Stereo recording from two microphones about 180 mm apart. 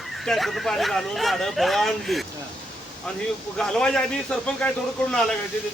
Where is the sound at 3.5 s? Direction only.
5° left (ahead or behind).